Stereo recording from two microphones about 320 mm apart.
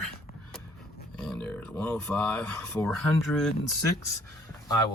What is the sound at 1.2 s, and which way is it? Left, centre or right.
Speech, centre.